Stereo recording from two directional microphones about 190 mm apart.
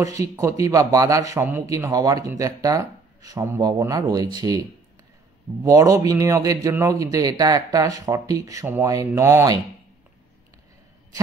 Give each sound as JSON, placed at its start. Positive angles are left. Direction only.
{"t": 0.0, "sound": "speech", "side_deg": -15}
{"t": 5.6, "sound": "speech", "side_deg": -15}